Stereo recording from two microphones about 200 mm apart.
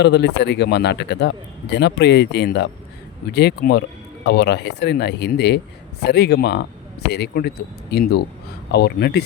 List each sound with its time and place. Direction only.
0.0 s speech: 55° left (ahead or behind)